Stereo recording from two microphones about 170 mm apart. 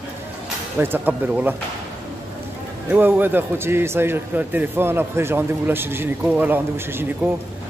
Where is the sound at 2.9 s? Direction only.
10° right (ahead or behind).